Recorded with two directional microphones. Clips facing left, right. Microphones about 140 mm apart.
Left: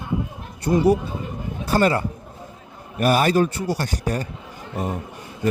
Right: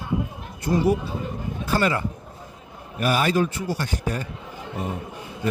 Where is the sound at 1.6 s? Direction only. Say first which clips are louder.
Left 4 dB; 35° left (ahead or behind).